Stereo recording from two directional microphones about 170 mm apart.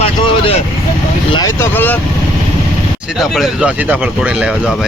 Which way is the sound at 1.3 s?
15° left (ahead or behind).